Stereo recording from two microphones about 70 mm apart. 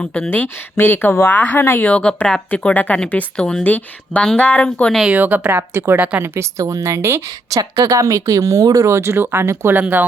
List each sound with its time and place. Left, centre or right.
0.0 s speech: centre
0.3 s speech: left; by 3.6 s centre
3.6 s speech: left
5.0 s a woman's voice: right
5.7 s speech: right
6.0 s a woman's voice: right
6.2 s speech: right
7.5 s speech: right